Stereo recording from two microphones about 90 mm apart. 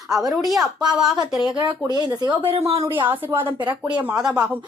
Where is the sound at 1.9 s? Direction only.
50° right (ahead or behind).